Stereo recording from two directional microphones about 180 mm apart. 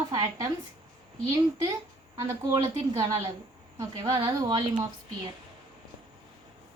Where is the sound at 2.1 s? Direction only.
20° right (ahead or behind).